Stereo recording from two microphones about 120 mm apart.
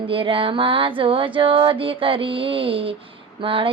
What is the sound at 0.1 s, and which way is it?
Mantra, 45° right (ahead or behind).